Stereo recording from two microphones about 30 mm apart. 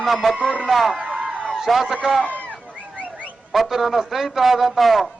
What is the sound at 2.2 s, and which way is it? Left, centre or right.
Speech, left.